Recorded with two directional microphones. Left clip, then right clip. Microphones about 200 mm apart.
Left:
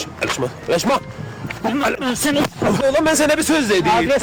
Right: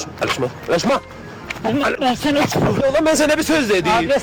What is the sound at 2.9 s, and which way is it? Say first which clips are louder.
Speech: even; 10° right (ahead or behind).